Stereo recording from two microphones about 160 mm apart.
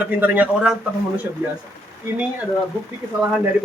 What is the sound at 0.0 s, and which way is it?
Speech, 10° right (ahead or behind).